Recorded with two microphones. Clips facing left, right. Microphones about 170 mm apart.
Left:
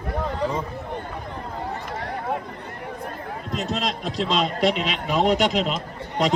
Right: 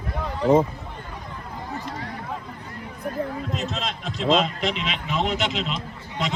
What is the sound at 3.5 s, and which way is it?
A man's voice, 35° left (ahead or behind).